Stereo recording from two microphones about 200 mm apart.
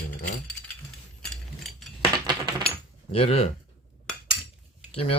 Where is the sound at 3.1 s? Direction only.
30° left (ahead or behind).